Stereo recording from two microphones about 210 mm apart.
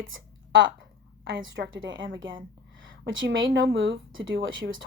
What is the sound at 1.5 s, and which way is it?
A woman's voice, 65° right (ahead or behind).